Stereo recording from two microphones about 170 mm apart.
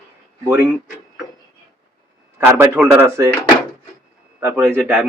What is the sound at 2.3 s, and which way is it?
Speech, 10° right (ahead or behind).